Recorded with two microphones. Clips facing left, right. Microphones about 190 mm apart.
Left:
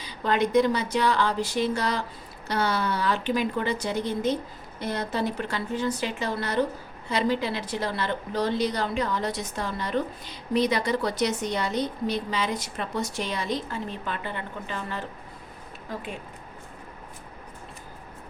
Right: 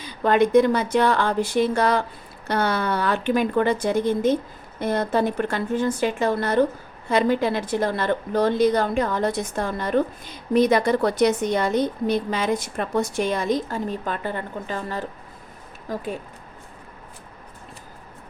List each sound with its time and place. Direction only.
0.0 s a woman's voice: 55° right (ahead or behind)